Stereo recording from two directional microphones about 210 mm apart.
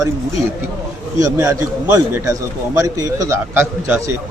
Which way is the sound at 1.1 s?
15° right (ahead or behind).